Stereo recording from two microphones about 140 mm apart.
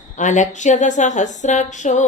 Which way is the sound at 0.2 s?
60° left (ahead or behind).